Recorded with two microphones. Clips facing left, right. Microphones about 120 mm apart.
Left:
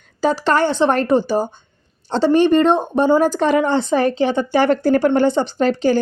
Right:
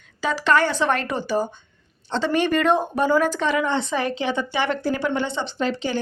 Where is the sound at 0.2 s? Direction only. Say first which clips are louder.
Left 4 dB; 35° left (ahead or behind).